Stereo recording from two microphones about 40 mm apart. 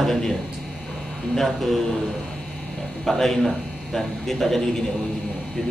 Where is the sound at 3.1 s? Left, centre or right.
Centre.